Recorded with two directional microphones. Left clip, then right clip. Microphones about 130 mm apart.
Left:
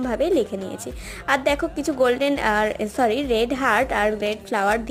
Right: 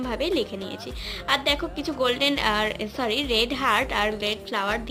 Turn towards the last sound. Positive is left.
turn(degrees=40)  # may be behind; listen again after turning